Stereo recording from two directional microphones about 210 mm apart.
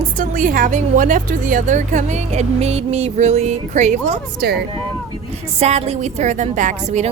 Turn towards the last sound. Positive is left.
turn(degrees=-35)  # may be behind; listen again after turning